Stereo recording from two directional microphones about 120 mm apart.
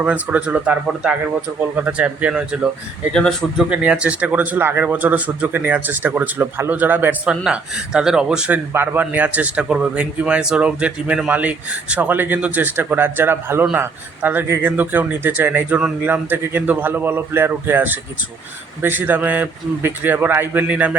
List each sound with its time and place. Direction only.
0.0 s a man's voice: 10° right (ahead or behind)
3.1 s speech: 5° left (ahead or behind)
3.7 s a man's voice: 10° right (ahead or behind)